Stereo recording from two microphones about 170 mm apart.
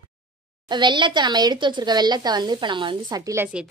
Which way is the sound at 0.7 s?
25° right (ahead or behind).